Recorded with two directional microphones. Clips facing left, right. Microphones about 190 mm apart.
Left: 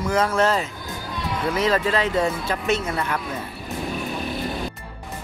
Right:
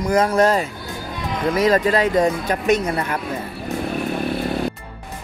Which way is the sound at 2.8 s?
35° right (ahead or behind).